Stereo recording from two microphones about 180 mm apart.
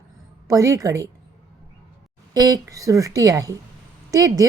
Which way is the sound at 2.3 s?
20° right (ahead or behind).